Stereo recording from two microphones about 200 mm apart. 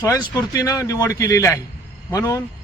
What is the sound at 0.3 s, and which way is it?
Speech, 15° left (ahead or behind).